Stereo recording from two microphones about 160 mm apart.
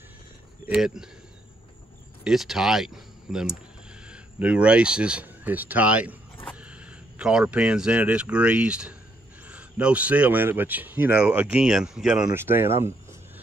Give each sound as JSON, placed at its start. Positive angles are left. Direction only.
{"t": 0.7, "sound": "speech", "side_deg": -5}
{"t": 2.2, "sound": "speech", "side_deg": 0}
{"t": 12.3, "sound": "speech", "side_deg": -15}